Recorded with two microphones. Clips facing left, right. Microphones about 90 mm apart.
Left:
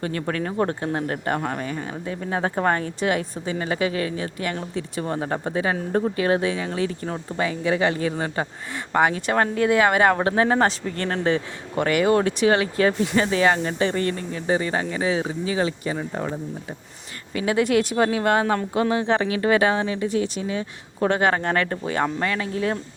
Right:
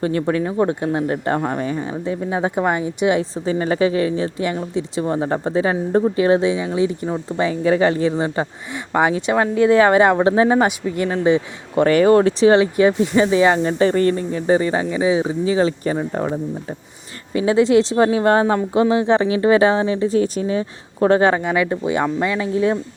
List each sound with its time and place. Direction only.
0.0 s speech: 25° right (ahead or behind)
8.1 s speech: 20° right (ahead or behind)
9.6 s a man's voice: 30° right (ahead or behind)
11.8 s speech: 30° right (ahead or behind)
13.7 s speech: 35° right (ahead or behind)
17.3 s speech: 25° right (ahead or behind)
21.3 s a man's voice: 10° right (ahead or behind)